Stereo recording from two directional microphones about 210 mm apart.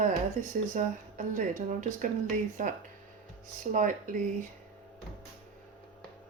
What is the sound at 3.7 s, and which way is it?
Speech, 40° right (ahead or behind).